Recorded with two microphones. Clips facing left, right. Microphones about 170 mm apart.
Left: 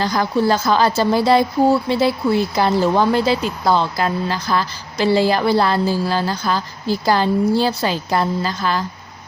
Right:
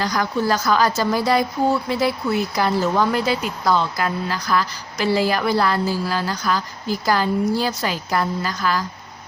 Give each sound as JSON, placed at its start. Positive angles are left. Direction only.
{"t": 0.0, "sound": "a woman's voice", "side_deg": 30}